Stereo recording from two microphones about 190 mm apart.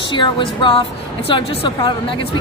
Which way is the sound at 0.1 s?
25° left (ahead or behind).